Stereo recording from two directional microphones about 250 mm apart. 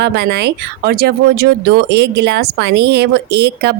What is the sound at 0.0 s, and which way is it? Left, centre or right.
Speech, right.